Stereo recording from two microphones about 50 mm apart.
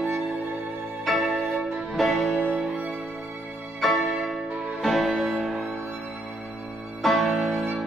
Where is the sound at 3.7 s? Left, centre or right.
Centre.